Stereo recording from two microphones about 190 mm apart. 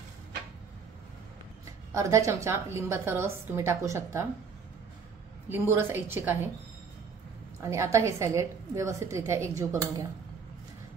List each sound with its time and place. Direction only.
2.0 s a woman's voice: 15° right (ahead or behind)
5.5 s a woman's voice: 10° right (ahead or behind)
7.6 s a woman's voice: 15° right (ahead or behind)